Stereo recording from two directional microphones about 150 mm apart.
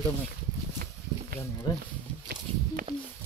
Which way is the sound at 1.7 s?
30° left (ahead or behind).